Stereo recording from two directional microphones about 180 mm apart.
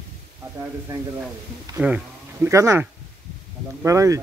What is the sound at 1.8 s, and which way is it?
Speech, 5° right (ahead or behind).